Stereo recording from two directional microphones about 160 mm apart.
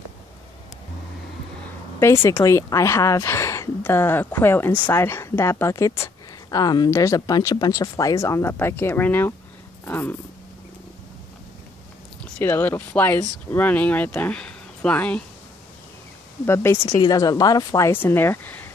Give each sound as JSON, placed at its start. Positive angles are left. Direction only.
{"t": 2.0, "sound": "speech", "side_deg": 15}
{"t": 12.4, "sound": "speech", "side_deg": 10}
{"t": 16.4, "sound": "a woman's voice", "side_deg": 15}